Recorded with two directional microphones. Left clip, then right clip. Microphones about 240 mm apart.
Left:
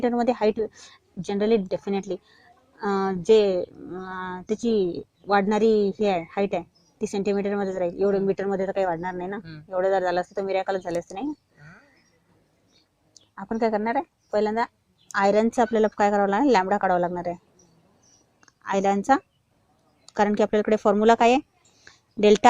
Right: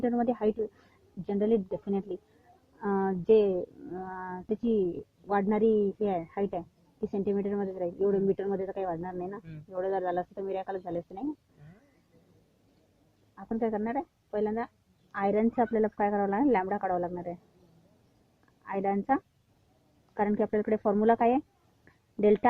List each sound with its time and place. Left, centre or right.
0.0 s speech: centre
13.3 s speech: centre
18.6 s speech: centre
21.8 s a sound: centre